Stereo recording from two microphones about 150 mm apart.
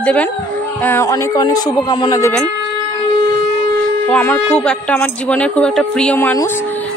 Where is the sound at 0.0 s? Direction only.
10° left (ahead or behind).